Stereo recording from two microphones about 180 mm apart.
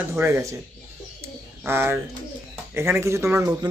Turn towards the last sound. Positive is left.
turn(degrees=-15)  # may be behind; listen again after turning